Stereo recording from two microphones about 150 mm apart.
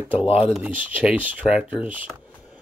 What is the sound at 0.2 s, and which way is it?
Speech, 40° left (ahead or behind).